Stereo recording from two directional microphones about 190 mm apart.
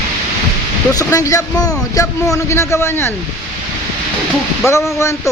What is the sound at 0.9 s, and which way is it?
Speech, 20° left (ahead or behind).